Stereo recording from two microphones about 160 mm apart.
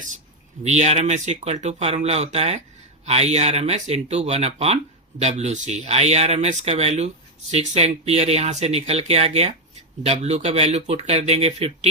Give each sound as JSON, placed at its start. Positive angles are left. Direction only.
{"t": 0.6, "sound": "speech", "side_deg": -45}